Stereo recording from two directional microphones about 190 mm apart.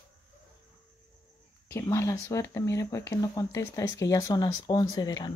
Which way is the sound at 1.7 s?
15° left (ahead or behind).